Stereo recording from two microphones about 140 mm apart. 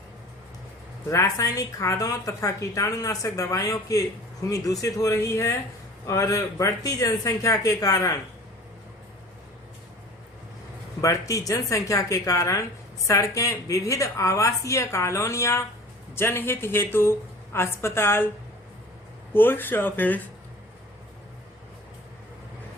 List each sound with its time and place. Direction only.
1.1 s a woman's voice: 20° left (ahead or behind)
11.0 s a woman's voice: 25° left (ahead or behind)
19.3 s a woman's voice: 15° left (ahead or behind)